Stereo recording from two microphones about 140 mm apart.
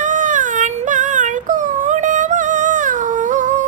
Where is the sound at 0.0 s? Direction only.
65° right (ahead or behind).